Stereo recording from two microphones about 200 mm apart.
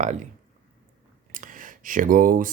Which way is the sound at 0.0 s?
40° right (ahead or behind).